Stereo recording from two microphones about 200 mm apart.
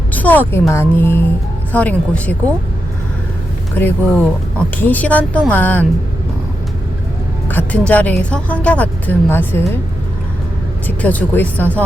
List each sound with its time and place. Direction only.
0.1 s a woman's voice: 10° left (ahead or behind)
3.8 s a woman's voice: 10° left (ahead or behind)
7.4 s a woman's voice: 10° left (ahead or behind)
10.8 s a woman's voice: 10° left (ahead or behind)